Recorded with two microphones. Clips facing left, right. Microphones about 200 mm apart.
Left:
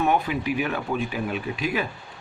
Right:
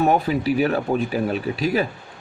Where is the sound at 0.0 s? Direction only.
35° right (ahead or behind).